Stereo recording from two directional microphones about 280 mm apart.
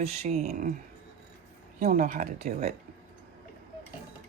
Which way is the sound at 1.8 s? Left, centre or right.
Right.